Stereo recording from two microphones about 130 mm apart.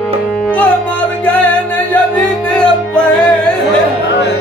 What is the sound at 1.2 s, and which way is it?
Music, 10° left (ahead or behind).